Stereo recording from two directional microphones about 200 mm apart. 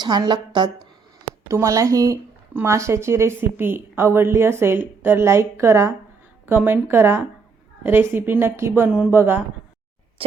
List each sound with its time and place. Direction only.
0.0 s a woman's voice: 20° right (ahead or behind)
10.2 s speech: 30° right (ahead or behind)